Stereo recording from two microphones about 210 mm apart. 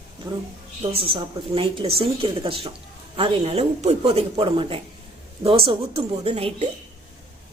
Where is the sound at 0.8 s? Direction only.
25° right (ahead or behind).